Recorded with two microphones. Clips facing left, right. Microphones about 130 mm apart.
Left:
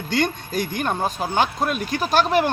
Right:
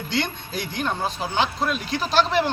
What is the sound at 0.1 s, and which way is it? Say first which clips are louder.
A man's voice: left 5 dB; 45° left (ahead or behind).